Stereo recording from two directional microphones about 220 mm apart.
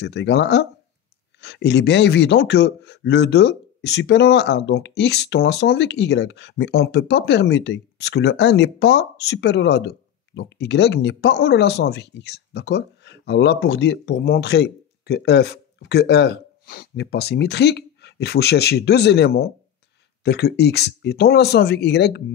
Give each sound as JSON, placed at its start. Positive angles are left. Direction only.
{"t": 0.0, "sound": "a man's voice", "side_deg": 50}